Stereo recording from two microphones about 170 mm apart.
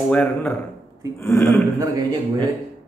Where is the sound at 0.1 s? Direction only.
10° left (ahead or behind).